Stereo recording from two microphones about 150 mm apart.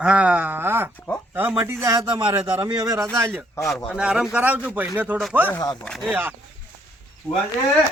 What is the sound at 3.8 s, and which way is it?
A man's voice, 5° right (ahead or behind).